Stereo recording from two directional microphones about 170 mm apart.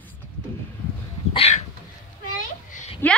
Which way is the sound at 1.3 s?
40° left (ahead or behind).